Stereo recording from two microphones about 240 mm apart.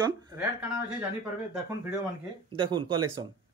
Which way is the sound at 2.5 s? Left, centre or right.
Right.